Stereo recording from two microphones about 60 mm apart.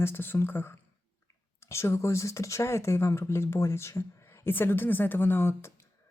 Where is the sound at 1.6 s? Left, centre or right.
Left.